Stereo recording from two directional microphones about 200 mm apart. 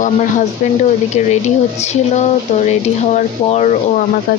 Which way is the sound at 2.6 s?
35° left (ahead or behind).